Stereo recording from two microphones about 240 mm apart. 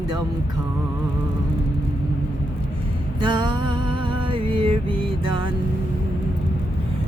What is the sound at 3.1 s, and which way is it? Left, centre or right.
Music, centre.